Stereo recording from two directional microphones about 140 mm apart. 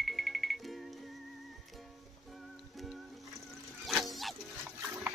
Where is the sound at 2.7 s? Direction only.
Centre (ahead or behind).